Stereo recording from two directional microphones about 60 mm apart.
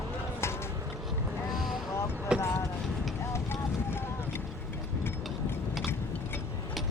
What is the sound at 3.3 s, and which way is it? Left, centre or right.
Clip-clop, left.